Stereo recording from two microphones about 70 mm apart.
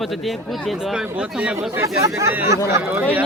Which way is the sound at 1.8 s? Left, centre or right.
Right.